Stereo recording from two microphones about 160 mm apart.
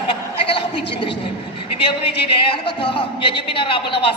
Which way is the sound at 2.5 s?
30° left (ahead or behind).